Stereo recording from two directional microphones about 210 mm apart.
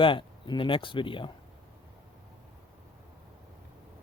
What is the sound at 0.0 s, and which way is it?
Speech, 25° left (ahead or behind).